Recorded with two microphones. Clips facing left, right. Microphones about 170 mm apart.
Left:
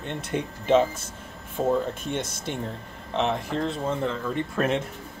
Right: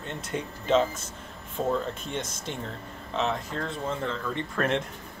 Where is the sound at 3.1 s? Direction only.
15° left (ahead or behind).